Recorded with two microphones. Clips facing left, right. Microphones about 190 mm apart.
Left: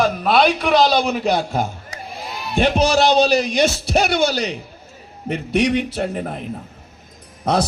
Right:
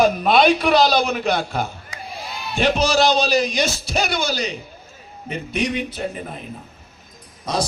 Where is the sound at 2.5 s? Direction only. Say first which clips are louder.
Left 2 dB; 55° left (ahead or behind); by 6.4 s 70° left (ahead or behind).